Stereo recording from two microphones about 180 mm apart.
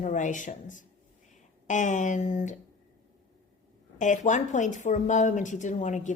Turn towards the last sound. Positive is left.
turn(degrees=40)  # may be behind; listen again after turning